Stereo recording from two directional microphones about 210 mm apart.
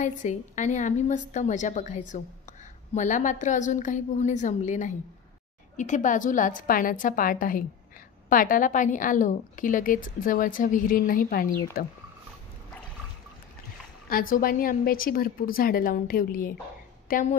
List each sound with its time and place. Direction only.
0.0 s a woman's voice: 35° left (ahead or behind)
14.3 s a woman's voice: 45° left (ahead or behind)